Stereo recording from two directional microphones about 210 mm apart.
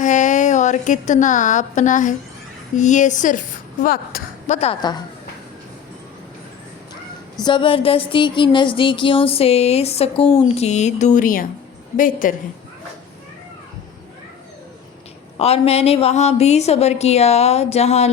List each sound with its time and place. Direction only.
0.0 s a woman's voice: 35° left (ahead or behind); by 5.0 s 20° left (ahead or behind)
7.4 s a sound: 25° left (ahead or behind)
10.5 s a woman's voice: 30° left (ahead or behind)
15.4 s a woman's voice: 30° left (ahead or behind)